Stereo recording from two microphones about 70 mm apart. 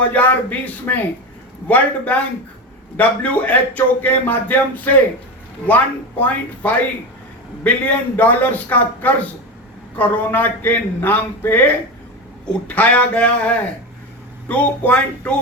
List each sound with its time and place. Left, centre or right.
0.0 s a man's voice: left